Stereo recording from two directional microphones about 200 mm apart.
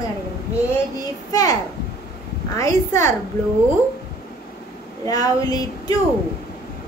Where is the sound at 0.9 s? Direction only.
15° left (ahead or behind).